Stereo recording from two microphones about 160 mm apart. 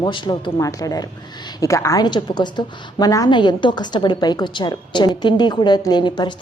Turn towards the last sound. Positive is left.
turn(degrees=30)  # may be behind; listen again after turning